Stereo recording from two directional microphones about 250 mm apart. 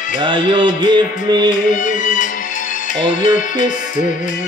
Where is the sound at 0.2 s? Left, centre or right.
Centre.